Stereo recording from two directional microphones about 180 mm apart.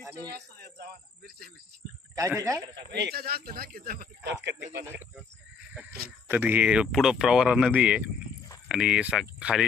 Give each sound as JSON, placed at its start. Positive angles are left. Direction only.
{"t": 0.3, "sound": "a man's voice", "side_deg": -60}
{"t": 2.1, "sound": "a man's voice", "side_deg": -15}
{"t": 2.9, "sound": "a man's voice", "side_deg": -65}
{"t": 5.8, "sound": "speech", "side_deg": -10}